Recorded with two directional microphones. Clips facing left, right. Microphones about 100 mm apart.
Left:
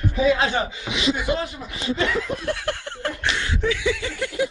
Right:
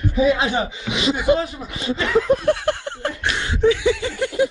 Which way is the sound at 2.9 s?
20° right (ahead or behind).